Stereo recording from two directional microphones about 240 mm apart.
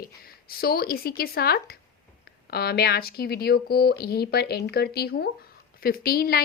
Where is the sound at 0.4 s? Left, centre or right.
Left.